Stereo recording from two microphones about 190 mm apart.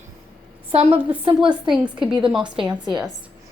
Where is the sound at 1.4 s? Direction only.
5° right (ahead or behind).